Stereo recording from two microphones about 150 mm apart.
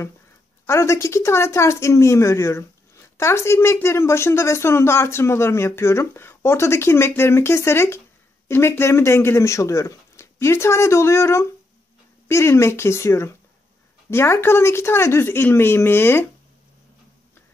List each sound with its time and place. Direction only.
0.7 s speech: 20° left (ahead or behind)